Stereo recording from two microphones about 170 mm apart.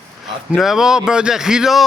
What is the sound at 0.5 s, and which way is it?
A man's voice, centre (ahead or behind).